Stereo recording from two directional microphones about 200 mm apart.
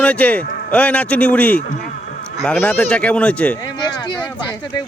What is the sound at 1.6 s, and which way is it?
Insect, 45° left (ahead or behind).